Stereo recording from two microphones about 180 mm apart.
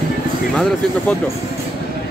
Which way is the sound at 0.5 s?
5° left (ahead or behind).